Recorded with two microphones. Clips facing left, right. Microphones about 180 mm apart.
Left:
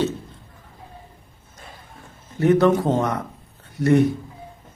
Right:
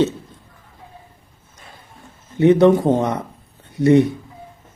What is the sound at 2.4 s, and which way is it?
A man's voice, 20° right (ahead or behind).